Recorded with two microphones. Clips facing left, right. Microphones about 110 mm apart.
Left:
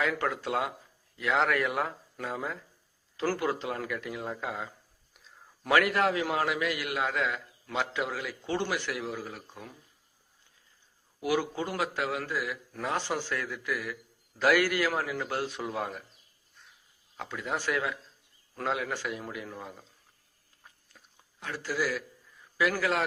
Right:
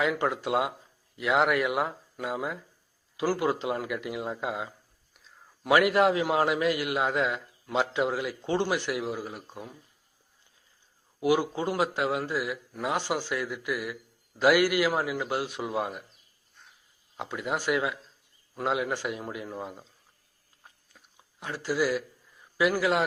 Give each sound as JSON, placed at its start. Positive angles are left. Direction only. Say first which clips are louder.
{"t": 0.0, "sound": "a man's voice", "louder": "right 3 dB", "side_deg": -15}
{"t": 5.1, "sound": "a sound", "louder": "even", "side_deg": 0}
{"t": 5.6, "sound": "a man's voice", "louder": "right 4 dB", "side_deg": -20}
{"t": 11.2, "sound": "a man's voice", "louder": "right 4 dB", "side_deg": -20}
{"t": 17.2, "sound": "a man's voice", "louder": "right 3 dB", "side_deg": -20}
{"t": 21.2, "sound": "a man's voice", "louder": "right 2 dB", "side_deg": -20}